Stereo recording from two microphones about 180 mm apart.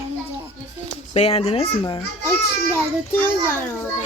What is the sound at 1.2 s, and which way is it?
Speech, 35° left (ahead or behind).